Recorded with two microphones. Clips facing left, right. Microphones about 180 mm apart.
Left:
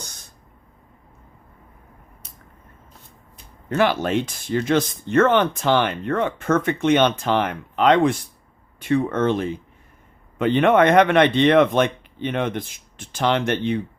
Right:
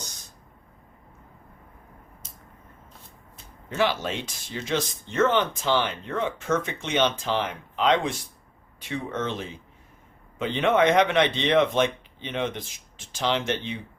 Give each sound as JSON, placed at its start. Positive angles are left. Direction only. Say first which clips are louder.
{"t": 3.7, "sound": "speech", "louder": "left 6 dB", "side_deg": 55}